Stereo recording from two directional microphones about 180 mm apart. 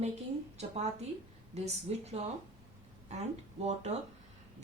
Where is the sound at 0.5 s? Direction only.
35° right (ahead or behind).